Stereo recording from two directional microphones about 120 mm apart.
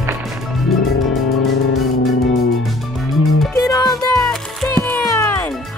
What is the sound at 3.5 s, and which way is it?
Music, 30° left (ahead or behind).